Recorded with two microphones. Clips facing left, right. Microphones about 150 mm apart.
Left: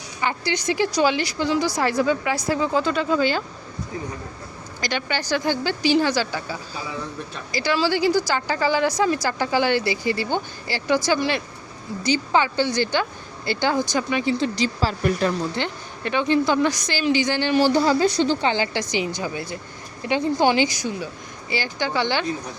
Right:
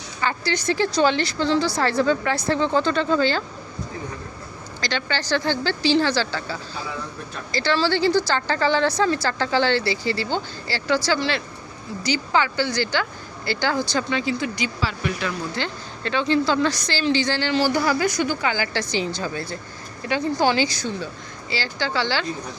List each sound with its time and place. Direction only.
0.2 s a woman's voice: 15° left (ahead or behind)
4.8 s a woman's voice: 15° left (ahead or behind)
14.3 s a woman's voice: 30° left (ahead or behind)
14.8 s speech: 40° left (ahead or behind)
15.5 s a woman's voice: 20° left (ahead or behind)